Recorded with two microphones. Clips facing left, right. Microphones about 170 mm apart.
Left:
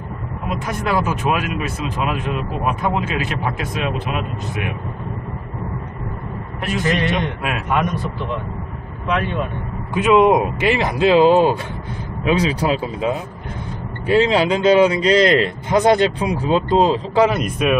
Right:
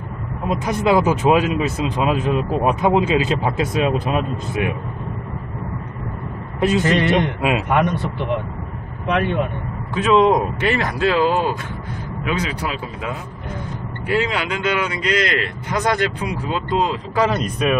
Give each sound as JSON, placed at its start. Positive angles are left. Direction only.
{"t": 0.5, "sound": "speech", "side_deg": -25}
{"t": 6.6, "sound": "speech", "side_deg": -25}
{"t": 9.0, "sound": "speech", "side_deg": -55}
{"t": 10.0, "sound": "speech", "side_deg": 15}
{"t": 17.3, "sound": "speech", "side_deg": 5}